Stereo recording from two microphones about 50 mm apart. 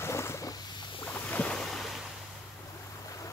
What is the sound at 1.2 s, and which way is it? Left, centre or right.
Boat, left.